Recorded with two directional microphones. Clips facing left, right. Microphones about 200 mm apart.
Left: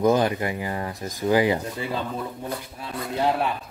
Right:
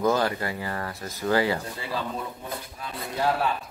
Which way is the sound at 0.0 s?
20° left (ahead or behind).